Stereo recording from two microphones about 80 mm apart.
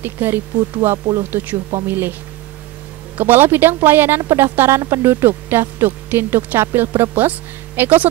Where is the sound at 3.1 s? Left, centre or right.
Right.